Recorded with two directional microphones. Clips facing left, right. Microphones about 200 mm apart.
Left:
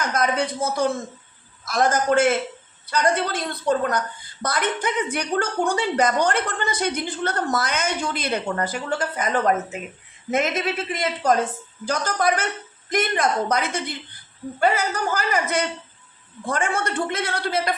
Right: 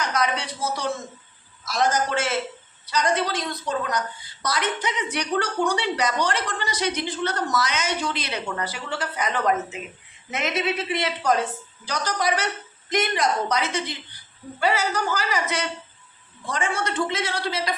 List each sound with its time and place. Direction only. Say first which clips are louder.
0.0 s a woman's voice: left 3 dB; 50° left (ahead or behind)